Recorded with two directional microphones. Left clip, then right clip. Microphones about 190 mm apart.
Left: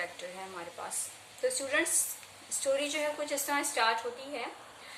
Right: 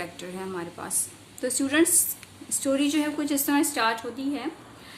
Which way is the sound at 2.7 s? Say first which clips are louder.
Right 6 dB; 50° right (ahead or behind).